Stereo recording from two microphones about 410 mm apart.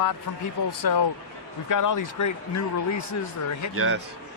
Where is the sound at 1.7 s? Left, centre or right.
Left.